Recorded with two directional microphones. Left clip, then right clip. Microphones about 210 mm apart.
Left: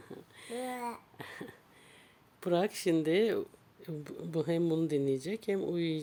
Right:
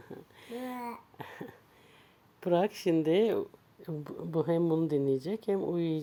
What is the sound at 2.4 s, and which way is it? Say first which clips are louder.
Speech: right 2 dB; 5° right (ahead or behind).